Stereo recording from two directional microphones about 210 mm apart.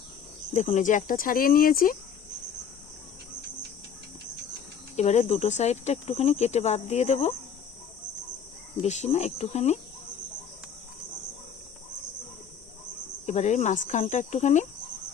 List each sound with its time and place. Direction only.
0.5 s speech: 35° left (ahead or behind)
4.9 s speech: 30° left (ahead or behind)
8.8 s speech: 30° left (ahead or behind)
13.2 s speech: 35° left (ahead or behind)